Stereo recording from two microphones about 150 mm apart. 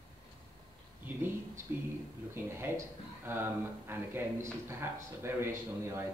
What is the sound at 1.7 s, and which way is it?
Speech, 10° right (ahead or behind).